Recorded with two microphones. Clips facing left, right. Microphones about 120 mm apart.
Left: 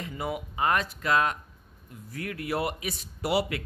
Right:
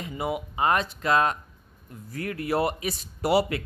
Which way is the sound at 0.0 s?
20° right (ahead or behind).